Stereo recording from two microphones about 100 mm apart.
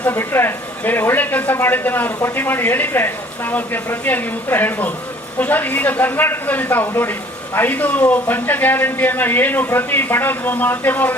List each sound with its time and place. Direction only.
0.0 s speech: 25° left (ahead or behind)